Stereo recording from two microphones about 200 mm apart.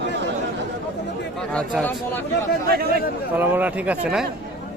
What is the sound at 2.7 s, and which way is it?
Speech, 50° right (ahead or behind).